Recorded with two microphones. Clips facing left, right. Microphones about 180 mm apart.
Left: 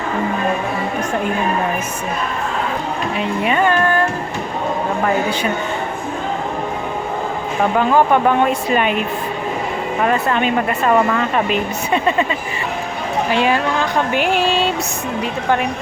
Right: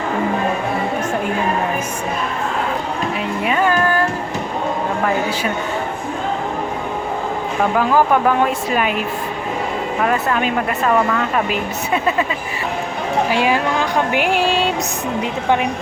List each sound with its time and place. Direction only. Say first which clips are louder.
3.2 s speech: left 2 dB; centre (ahead or behind)
7.8 s speech: left 1 dB; 5° right (ahead or behind)
13.3 s speech: left 3 dB; 10° right (ahead or behind)